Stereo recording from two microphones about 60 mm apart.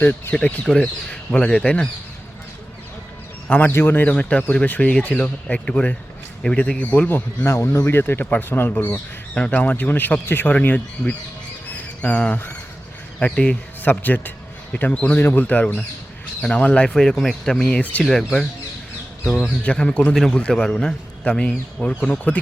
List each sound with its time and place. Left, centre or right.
0.0 s speech: left
0.6 s speech: centre
3.7 s speech: left
4.1 s speech: left
7.4 s speech: left
7.9 s speech: left
9.3 s a man's voice: left
16.9 s speech: centre
18.0 s speech: centre
19.6 s speech: centre
20.5 s speech: centre